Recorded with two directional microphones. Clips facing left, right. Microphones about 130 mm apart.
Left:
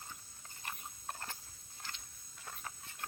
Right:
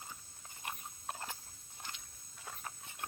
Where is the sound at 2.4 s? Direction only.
20° right (ahead or behind).